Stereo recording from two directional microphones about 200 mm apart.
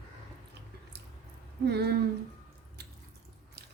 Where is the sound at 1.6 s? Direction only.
55° right (ahead or behind).